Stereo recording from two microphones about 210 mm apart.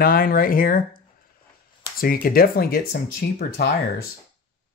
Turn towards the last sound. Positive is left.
turn(degrees=45)  # may be behind; listen again after turning